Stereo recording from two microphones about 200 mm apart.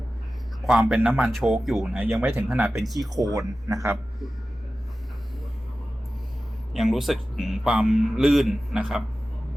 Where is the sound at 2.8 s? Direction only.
Centre (ahead or behind).